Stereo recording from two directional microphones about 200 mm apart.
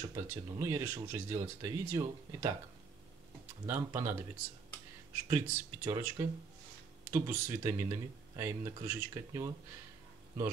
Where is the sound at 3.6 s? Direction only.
10° right (ahead or behind).